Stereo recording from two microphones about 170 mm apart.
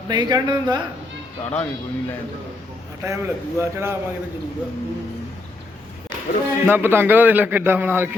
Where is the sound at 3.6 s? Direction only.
15° right (ahead or behind).